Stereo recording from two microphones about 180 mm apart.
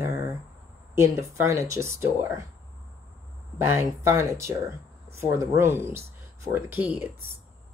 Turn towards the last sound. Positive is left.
turn(degrees=-10)  # may be behind; listen again after turning